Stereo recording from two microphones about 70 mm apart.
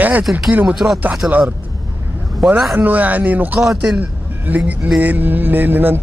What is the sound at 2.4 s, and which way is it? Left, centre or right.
Speech, centre.